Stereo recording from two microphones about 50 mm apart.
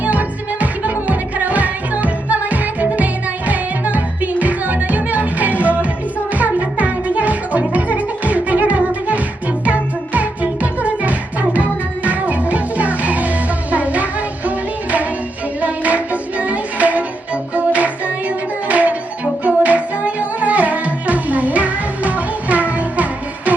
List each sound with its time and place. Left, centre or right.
0.0 s music: right